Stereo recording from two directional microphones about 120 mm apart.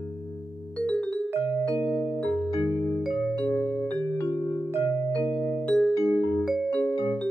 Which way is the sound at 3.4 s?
10° left (ahead or behind).